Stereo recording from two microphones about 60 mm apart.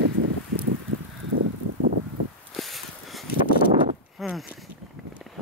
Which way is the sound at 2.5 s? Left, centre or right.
Centre.